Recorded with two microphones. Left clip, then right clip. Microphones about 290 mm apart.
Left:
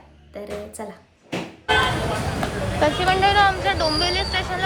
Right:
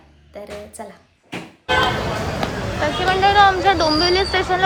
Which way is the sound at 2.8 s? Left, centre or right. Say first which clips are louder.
Right 1 dB; centre.